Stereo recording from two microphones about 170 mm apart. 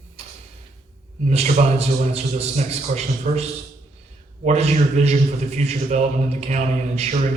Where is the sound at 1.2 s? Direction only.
40° right (ahead or behind).